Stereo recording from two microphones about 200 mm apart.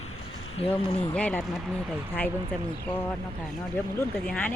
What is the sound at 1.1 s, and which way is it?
Speech, 5° left (ahead or behind).